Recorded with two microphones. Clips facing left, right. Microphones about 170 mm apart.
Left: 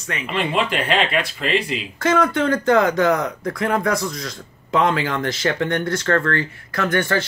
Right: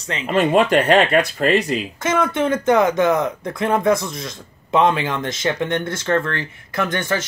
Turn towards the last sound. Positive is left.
turn(degrees=-20)  # may be behind; listen again after turning